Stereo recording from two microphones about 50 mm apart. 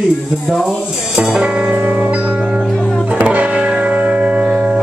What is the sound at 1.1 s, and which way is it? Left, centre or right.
Music, centre.